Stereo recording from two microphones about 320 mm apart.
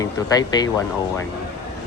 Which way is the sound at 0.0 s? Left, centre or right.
Centre.